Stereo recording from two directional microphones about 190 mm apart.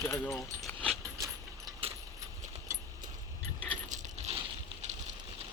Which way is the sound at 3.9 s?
35° right (ahead or behind).